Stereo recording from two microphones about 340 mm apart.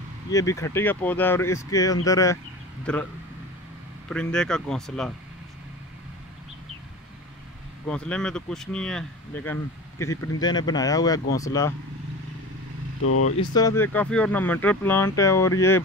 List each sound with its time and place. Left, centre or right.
0.3 s speech: centre
4.1 s speech: centre
7.9 s speech: centre
13.0 s speech: left
13.4 s speech: centre